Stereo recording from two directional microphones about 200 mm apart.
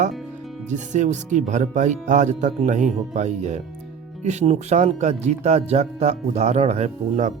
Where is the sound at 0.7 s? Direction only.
35° right (ahead or behind).